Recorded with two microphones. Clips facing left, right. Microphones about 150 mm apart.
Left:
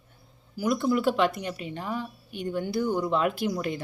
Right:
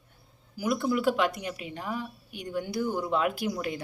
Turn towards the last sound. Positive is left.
turn(degrees=-5)  # may be behind; listen again after turning